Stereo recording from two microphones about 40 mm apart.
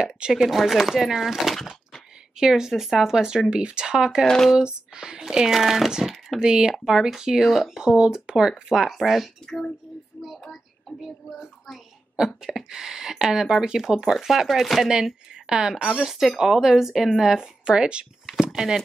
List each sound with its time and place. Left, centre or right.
0.3 s speech: centre
2.0 s a sound: centre
2.7 s speech: centre; by 5.2 s right
5.5 s speech: centre
6.0 s a sound: centre
6.4 s speech: right
6.8 s speech: centre
7.8 s speech: centre
10.1 s a sound: left
11.0 s speech: centre
12.4 s speech: centre
15.3 s speech: centre
18.5 s a sound: centre